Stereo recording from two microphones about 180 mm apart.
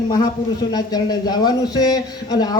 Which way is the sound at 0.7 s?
20° left (ahead or behind).